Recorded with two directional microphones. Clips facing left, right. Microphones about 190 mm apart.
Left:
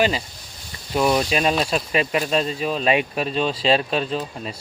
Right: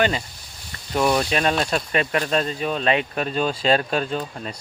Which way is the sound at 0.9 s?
5° left (ahead or behind).